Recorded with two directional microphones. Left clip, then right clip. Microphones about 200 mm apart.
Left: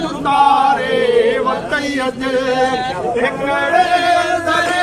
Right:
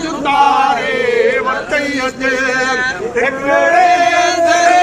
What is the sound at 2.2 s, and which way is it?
Music, 5° right (ahead or behind).